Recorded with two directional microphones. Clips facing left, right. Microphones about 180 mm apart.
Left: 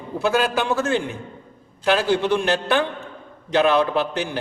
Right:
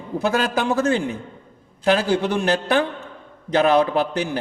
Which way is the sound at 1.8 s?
40° right (ahead or behind).